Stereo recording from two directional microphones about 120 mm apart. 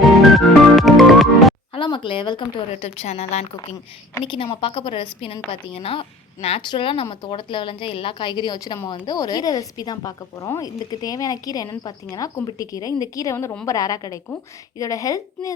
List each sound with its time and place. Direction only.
0.0 s music: centre (ahead or behind)
1.7 s a sound: 45° left (ahead or behind)
2.7 s a woman's voice: 60° left (ahead or behind)
4.2 s a woman's voice: 50° left (ahead or behind); by 15.5 s 25° left (ahead or behind)